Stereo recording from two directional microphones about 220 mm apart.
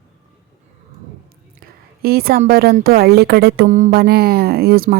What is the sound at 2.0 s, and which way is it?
A woman's voice, 45° right (ahead or behind).